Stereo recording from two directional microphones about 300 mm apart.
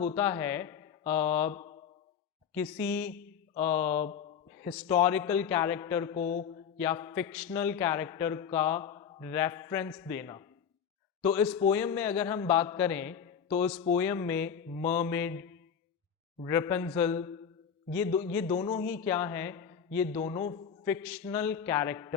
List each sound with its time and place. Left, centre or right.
0.0 s a man's voice: centre
6.1 s speech: left
6.7 s a man's voice: centre
20.8 s a man's voice: centre